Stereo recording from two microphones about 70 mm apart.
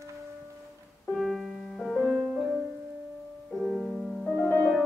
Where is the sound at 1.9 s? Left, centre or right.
Left.